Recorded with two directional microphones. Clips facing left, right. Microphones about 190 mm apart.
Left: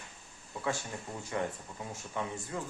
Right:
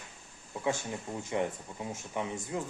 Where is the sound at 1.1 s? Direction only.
15° right (ahead or behind).